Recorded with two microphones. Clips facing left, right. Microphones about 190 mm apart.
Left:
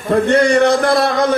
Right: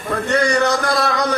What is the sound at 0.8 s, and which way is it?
Speech, 55° left (ahead or behind).